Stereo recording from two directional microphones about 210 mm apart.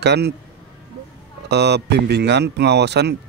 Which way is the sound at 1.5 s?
55° right (ahead or behind).